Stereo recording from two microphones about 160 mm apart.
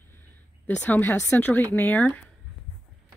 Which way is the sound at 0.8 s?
10° left (ahead or behind).